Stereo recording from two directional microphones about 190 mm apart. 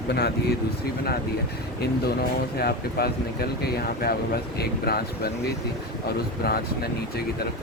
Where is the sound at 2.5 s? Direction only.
55° left (ahead or behind).